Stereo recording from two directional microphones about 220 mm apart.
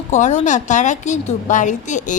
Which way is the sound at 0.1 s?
30° left (ahead or behind).